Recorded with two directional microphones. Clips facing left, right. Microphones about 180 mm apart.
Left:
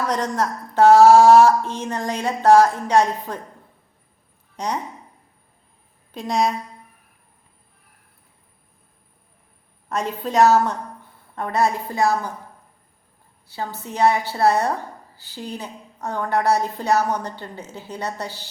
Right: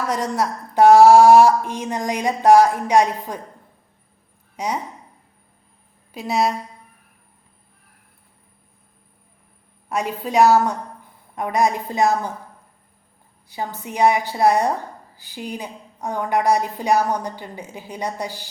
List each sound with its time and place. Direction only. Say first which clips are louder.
0.1 s a woman's voice: even; 10° right (ahead or behind)
4.5 s speech: right 1 dB; 10° right (ahead or behind)
6.1 s a woman's voice: even; 5° right (ahead or behind)
9.9 s a woman's voice: right 1 dB; 10° right (ahead or behind)
13.5 s a woman's voice: right 1 dB; 15° right (ahead or behind)